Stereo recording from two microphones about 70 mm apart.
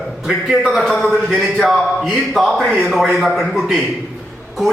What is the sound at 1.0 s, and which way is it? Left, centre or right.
Speech, right.